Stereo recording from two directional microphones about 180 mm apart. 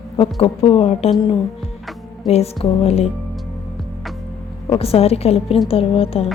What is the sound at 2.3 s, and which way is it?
Speech, 35° left (ahead or behind).